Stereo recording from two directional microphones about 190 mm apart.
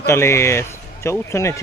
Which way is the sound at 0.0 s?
15° left (ahead or behind).